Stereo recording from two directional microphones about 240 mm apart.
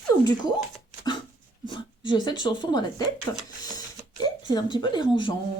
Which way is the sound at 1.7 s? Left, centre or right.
Centre.